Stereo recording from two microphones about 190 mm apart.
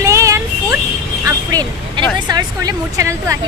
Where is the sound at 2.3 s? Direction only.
20° right (ahead or behind).